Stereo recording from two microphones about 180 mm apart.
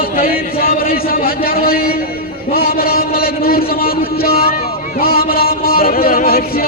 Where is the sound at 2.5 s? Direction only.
55° left (ahead or behind).